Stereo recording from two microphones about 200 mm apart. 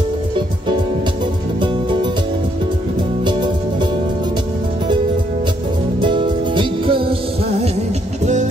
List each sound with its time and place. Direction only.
5.9 s music: 25° right (ahead or behind)